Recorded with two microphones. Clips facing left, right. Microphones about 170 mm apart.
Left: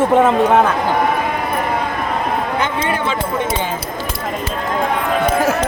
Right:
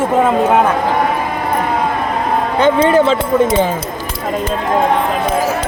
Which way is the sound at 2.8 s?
40° right (ahead or behind).